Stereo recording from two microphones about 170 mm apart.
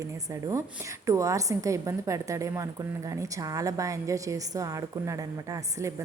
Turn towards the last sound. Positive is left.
turn(degrees=-20)  # may be behind; listen again after turning